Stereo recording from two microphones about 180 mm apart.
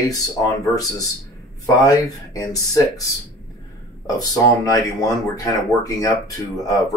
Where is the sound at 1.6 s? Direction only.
15° left (ahead or behind).